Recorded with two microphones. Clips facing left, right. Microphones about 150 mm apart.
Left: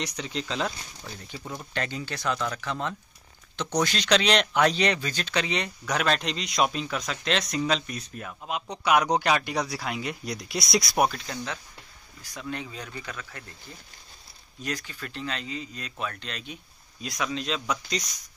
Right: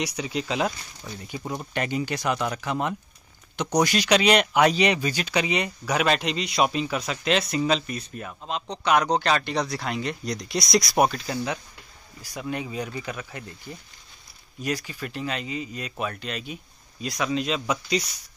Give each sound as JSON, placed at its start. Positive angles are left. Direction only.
{"t": 0.0, "sound": "speech", "side_deg": -10}
{"t": 1.0, "sound": "speech", "side_deg": 0}
{"t": 1.4, "sound": "speech", "side_deg": -30}
{"t": 1.7, "sound": "speech", "side_deg": -15}
{"t": 14.6, "sound": "speech", "side_deg": -10}